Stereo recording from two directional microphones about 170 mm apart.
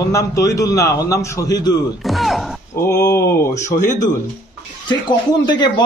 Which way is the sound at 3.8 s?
45° left (ahead or behind).